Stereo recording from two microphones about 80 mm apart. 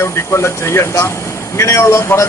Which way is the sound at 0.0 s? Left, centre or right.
Left.